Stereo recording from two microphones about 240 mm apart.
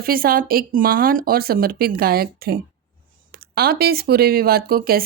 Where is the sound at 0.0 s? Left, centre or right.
Right.